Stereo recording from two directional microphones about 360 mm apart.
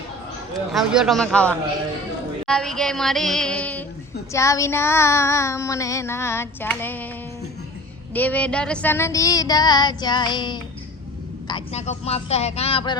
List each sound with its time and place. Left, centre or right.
0.7 s a sound: centre
4.3 s child singing: centre
8.1 s child singing: centre